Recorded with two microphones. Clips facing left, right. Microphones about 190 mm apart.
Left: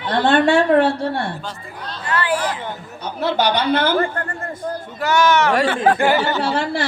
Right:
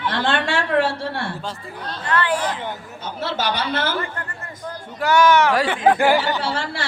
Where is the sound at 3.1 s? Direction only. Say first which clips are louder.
Left 6 dB; 40° left (ahead or behind).